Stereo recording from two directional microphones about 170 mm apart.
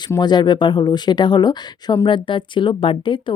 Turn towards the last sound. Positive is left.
turn(degrees=30)  # may be behind; listen again after turning